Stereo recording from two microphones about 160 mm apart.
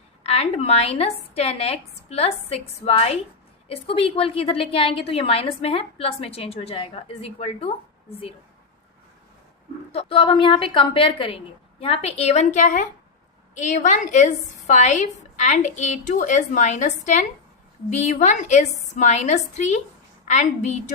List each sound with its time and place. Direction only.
0.2 s a woman's voice: 40° left (ahead or behind)
9.9 s a woman's voice: 35° left (ahead or behind)